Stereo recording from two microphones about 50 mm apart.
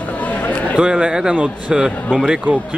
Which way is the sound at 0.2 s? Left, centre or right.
Left.